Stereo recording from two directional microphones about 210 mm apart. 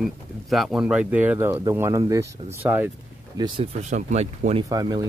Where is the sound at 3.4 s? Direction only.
30° right (ahead or behind).